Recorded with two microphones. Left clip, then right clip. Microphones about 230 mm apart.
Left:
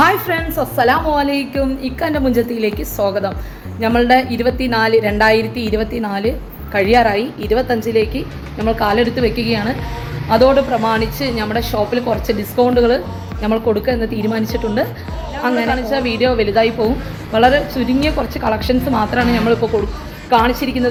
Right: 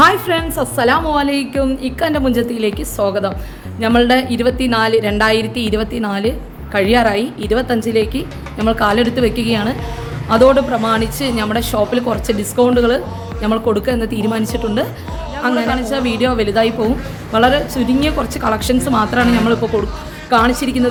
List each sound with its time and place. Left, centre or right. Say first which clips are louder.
0.0 s a woman's voice: right 2 dB; centre